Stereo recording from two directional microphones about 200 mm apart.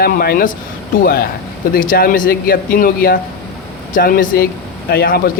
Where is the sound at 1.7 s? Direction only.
45° left (ahead or behind).